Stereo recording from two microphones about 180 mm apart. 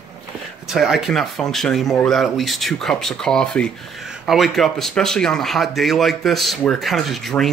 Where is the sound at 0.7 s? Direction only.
Centre (ahead or behind).